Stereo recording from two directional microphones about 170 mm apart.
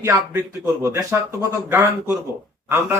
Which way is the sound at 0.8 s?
15° right (ahead or behind).